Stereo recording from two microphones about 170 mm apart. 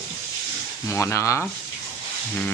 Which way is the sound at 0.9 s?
15° left (ahead or behind).